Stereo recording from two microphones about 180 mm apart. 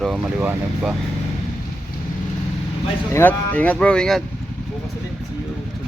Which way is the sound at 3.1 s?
10° left (ahead or behind).